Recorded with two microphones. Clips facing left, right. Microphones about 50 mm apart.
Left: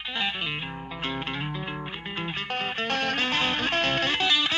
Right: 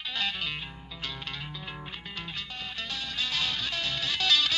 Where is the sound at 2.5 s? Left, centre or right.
Left.